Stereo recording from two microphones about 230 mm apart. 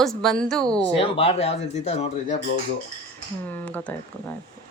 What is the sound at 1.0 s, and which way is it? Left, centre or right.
Speech, left.